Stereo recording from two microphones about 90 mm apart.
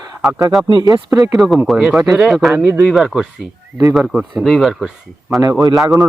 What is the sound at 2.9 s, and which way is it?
Speech, centre (ahead or behind).